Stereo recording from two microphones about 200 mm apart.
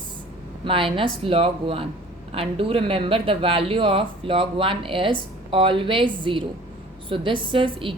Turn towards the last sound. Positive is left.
turn(degrees=-25)  # may be behind; listen again after turning